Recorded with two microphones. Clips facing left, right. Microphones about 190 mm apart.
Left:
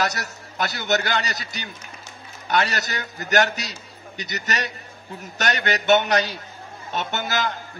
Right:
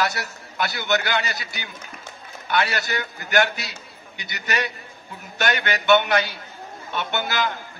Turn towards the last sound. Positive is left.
turn(degrees=40)  # may be behind; listen again after turning